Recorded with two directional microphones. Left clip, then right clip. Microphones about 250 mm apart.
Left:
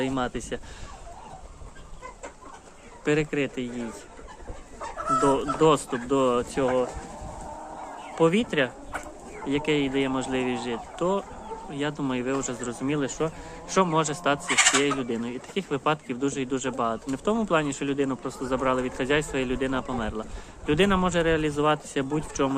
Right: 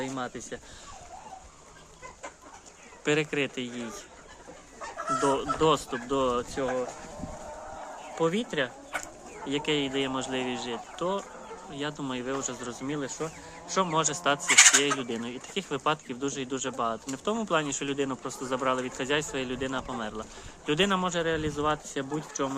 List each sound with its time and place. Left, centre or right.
0.0 s speech: centre
3.0 s speech: centre
5.2 s speech: centre
8.2 s speech: centre
13.9 s speech: centre
14.4 s speech: right
14.8 s speech: centre